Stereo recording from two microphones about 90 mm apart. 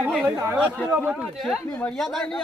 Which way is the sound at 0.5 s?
15° right (ahead or behind).